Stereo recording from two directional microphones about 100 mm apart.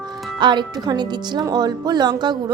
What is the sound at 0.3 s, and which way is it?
Speech, 50° right (ahead or behind).